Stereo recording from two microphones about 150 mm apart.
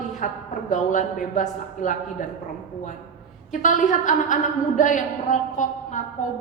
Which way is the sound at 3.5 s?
60° left (ahead or behind).